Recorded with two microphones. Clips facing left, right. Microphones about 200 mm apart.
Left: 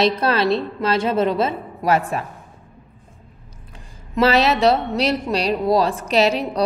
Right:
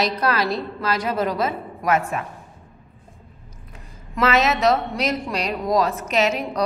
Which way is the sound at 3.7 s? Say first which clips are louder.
Left 6 dB; 30° left (ahead or behind).